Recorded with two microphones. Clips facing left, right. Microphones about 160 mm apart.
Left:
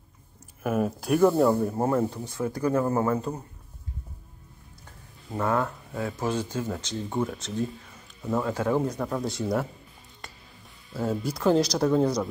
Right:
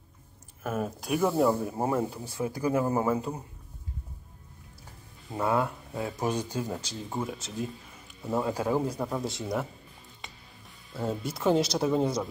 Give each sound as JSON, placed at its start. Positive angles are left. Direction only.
{"t": 0.7, "sound": "speech", "side_deg": 5}
{"t": 5.3, "sound": "speech", "side_deg": -15}
{"t": 10.2, "sound": "music", "side_deg": 0}
{"t": 11.0, "sound": "speech", "side_deg": 0}